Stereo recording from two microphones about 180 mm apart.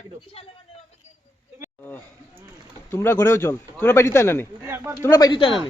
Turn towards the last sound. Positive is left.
turn(degrees=30)  # may be behind; listen again after turning